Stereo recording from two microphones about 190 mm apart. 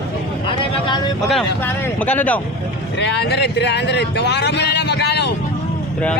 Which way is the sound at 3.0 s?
65° left (ahead or behind).